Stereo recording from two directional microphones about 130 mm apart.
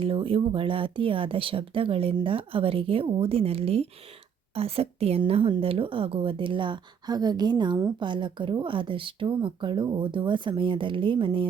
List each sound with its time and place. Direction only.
0.0 s a woman's voice: 45° right (ahead or behind)